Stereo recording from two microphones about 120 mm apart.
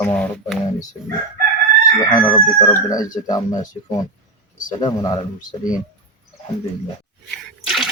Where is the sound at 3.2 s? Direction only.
35° left (ahead or behind).